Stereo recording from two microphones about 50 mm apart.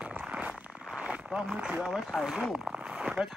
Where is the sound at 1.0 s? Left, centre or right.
Right.